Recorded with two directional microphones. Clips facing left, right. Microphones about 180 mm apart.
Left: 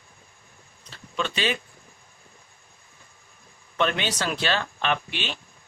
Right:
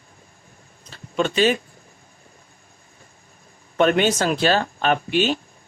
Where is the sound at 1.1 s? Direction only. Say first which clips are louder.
Right 8 dB; 45° right (ahead or behind).